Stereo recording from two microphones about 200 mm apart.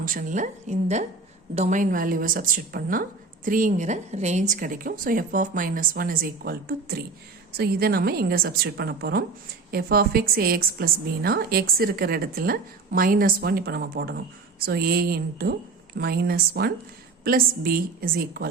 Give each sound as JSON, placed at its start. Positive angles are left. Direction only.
{"t": 0.0, "sound": "a woman's voice", "side_deg": -45}